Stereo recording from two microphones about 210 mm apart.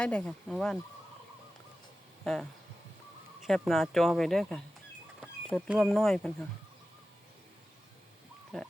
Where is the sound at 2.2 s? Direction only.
5° left (ahead or behind).